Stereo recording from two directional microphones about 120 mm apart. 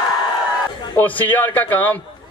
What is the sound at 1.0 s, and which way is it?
A man's voice, 15° left (ahead or behind).